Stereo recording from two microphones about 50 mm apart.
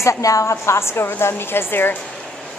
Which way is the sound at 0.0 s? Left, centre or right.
Left.